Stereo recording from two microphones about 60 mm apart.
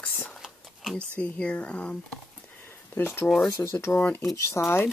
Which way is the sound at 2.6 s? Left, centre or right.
Left.